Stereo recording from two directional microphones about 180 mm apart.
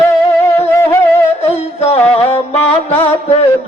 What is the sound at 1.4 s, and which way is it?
Music, 35° left (ahead or behind).